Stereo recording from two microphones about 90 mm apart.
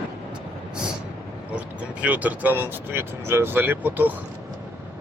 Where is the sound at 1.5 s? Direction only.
15° right (ahead or behind).